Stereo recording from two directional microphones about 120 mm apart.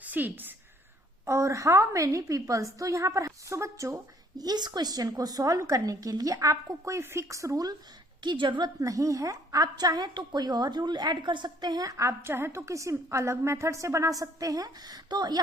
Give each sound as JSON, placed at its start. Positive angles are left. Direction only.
{"t": 0.0, "sound": "a woman's voice", "side_deg": -15}